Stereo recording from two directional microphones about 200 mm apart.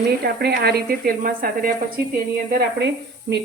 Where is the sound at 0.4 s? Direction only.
50° right (ahead or behind).